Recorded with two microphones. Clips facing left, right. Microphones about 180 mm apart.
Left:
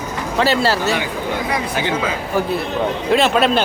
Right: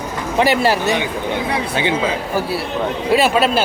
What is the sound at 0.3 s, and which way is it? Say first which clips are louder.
Speech: right 2 dB; 15° right (ahead or behind).